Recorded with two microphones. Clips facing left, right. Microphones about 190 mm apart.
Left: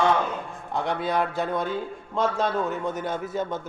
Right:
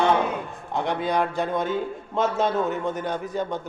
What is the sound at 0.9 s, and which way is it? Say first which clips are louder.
Speech: right 2 dB; 5° left (ahead or behind).